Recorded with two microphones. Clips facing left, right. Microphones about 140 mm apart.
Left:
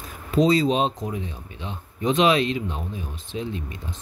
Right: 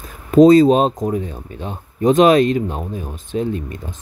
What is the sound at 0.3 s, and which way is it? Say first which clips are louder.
Speech: right 10 dB; 50° right (ahead or behind).